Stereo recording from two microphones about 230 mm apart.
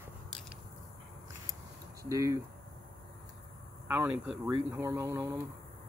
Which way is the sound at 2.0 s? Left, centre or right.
Centre.